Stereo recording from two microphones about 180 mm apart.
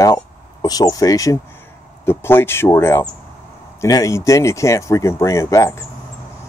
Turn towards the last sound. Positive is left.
turn(degrees=15)  # may be behind; listen again after turning